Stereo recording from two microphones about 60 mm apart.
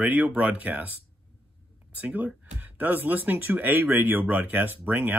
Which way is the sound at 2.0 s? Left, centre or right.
Right.